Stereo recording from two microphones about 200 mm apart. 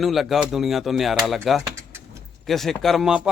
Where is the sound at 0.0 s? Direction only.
Centre (ahead or behind).